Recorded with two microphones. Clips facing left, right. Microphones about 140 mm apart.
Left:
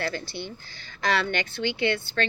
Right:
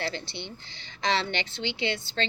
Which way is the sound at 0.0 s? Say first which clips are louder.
Left 3 dB; 25° right (ahead or behind).